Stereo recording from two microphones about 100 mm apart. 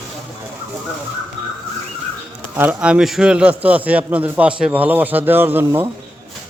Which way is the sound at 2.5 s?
15° right (ahead or behind).